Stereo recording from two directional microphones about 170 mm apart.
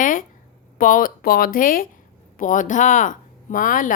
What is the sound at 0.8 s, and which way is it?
Speech, 55° left (ahead or behind).